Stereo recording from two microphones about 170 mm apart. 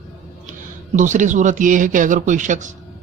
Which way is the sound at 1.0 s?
45° right (ahead or behind).